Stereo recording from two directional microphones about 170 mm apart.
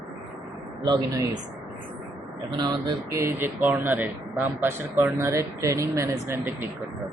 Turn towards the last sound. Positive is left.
turn(degrees=-15)  # may be behind; listen again after turning